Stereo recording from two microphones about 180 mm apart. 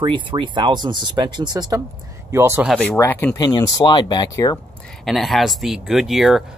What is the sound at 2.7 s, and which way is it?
Speech, 10° left (ahead or behind).